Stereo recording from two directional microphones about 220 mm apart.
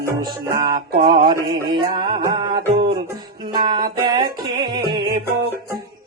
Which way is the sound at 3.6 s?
20° right (ahead or behind).